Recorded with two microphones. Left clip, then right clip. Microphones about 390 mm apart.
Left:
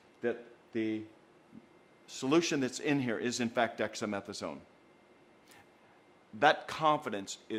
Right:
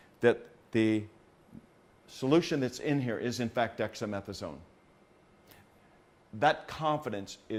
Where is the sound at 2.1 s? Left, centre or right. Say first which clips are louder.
Right 2 dB; right.